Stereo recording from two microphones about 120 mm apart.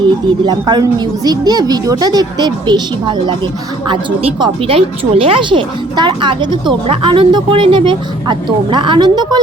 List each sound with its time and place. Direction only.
0.0 s a woman's voice: 40° right (ahead or behind)